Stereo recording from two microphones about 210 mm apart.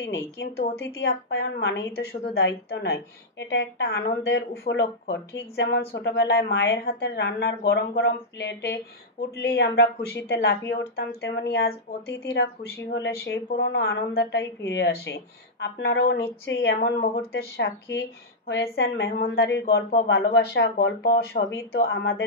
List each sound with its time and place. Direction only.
0.7 s a woman's voice: 50° left (ahead or behind)